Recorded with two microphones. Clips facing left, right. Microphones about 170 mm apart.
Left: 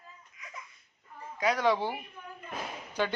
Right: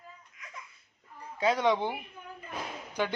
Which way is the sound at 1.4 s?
25° right (ahead or behind).